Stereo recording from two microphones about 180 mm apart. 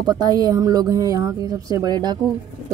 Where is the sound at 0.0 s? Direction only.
20° right (ahead or behind).